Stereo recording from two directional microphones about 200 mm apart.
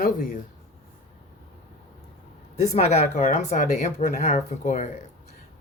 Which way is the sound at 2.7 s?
35° left (ahead or behind).